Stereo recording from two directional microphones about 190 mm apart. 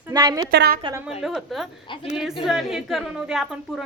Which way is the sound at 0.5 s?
60° right (ahead or behind).